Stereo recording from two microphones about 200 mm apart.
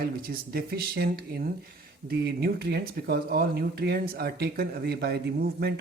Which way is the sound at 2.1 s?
50° right (ahead or behind).